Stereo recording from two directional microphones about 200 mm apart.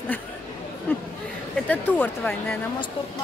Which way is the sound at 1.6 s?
10° left (ahead or behind).